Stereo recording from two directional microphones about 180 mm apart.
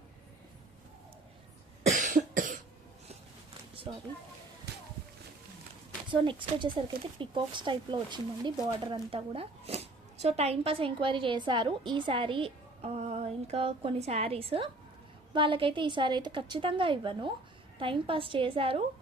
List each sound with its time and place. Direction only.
1.9 s cough: 45° right (ahead or behind)
6.1 s speech: 25° right (ahead or behind)